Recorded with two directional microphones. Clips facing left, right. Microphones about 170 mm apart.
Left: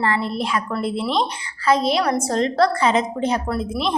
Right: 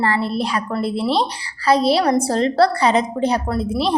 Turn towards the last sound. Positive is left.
turn(degrees=-35)  # may be behind; listen again after turning